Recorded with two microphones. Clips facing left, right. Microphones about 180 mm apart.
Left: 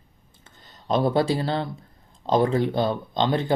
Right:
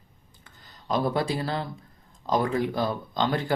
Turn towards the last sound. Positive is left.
turn(degrees=20)  # may be behind; listen again after turning